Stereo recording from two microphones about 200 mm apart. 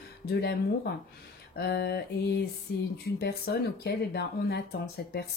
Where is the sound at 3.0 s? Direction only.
50° left (ahead or behind).